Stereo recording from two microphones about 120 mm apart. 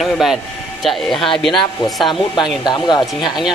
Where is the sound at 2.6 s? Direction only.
40° left (ahead or behind).